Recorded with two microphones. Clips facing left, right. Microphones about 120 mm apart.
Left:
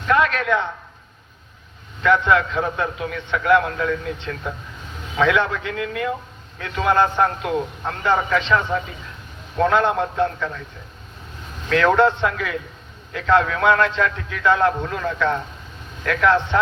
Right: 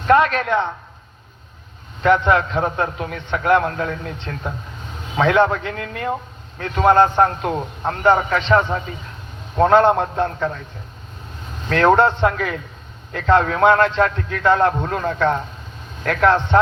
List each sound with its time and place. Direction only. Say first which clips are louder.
0.0 s a man's voice: right 4 dB; 40° right (ahead or behind)
2.0 s a man's voice: right 2 dB; 35° right (ahead or behind)
11.7 s a man's voice: right 2 dB; 40° right (ahead or behind)